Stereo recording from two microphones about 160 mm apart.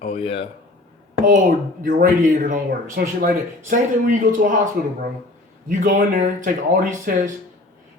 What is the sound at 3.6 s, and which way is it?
Speech, 55° right (ahead or behind).